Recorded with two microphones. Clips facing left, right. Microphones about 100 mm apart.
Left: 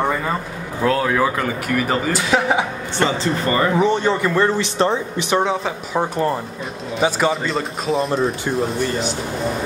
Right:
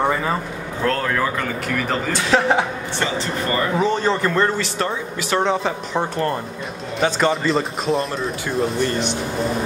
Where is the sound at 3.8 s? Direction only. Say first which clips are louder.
Left 2 dB; 15° left (ahead or behind).